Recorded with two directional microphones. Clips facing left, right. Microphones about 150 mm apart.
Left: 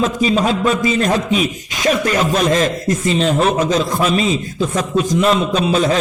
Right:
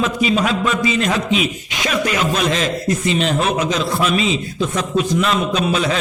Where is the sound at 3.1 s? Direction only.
35° left (ahead or behind).